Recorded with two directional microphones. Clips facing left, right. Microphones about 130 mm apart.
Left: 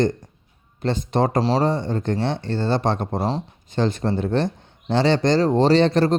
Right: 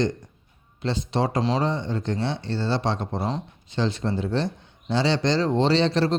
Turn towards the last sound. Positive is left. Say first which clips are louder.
# left 4 dB
turn(degrees=50)  # may be behind; listen again after turning